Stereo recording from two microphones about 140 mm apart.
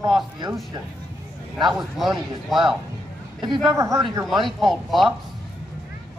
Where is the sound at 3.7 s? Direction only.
20° right (ahead or behind).